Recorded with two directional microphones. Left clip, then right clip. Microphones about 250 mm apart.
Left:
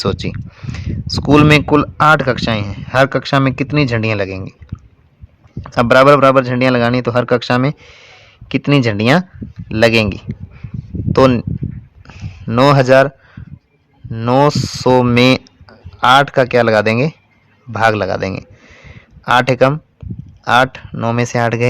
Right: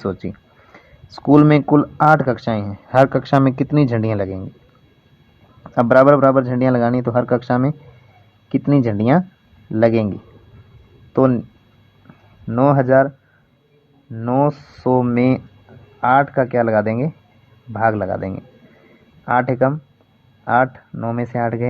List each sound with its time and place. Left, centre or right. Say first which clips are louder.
0.0 s speech: left 6 dB; left
1.6 s speech: left 3 dB; left
2.1 s speech: left 3 dB; centre
3.1 s speech: left 1 dB; centre
5.6 s speech: left 3 dB; left
6.4 s speech: left 4 dB; centre
9.7 s speech: left 4 dB; left
11.1 s speech: left 5 dB; left
12.0 s a sound: left 5 dB; left
14.1 s speech: left 6 dB; left